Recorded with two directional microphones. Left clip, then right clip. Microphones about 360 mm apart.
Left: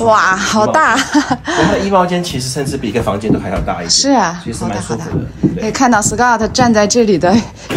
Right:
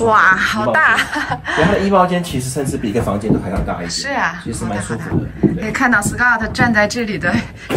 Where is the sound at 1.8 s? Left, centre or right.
Centre.